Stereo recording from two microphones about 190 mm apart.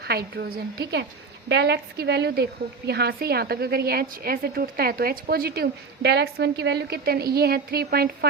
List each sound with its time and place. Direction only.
0.0 s a woman's voice: 55° right (ahead or behind)